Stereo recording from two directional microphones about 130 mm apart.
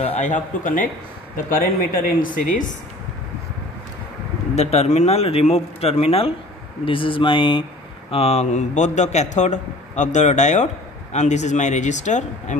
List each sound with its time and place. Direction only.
0.2 s speech: 80° left
4.6 s speech: 55° left (ahead or behind); by 7.6 s 40° left (ahead or behind)
8.1 s a man's voice: 55° left (ahead or behind)